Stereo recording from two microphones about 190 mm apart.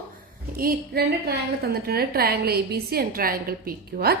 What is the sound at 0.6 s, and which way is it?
A woman's voice, 50° right (ahead or behind).